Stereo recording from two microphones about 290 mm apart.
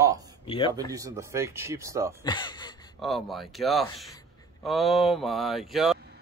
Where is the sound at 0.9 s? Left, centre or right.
Centre.